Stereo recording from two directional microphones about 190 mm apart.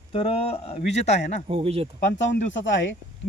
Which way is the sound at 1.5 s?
30° right (ahead or behind).